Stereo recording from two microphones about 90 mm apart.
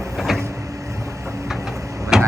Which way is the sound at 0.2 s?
Centre (ahead or behind).